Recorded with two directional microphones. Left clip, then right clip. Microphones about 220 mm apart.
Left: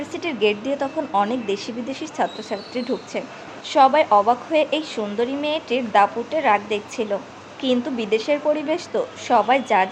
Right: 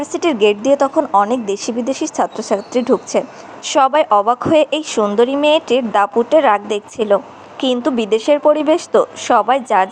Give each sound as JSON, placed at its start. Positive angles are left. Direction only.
{"t": 0.0, "sound": "a woman's voice", "side_deg": -25}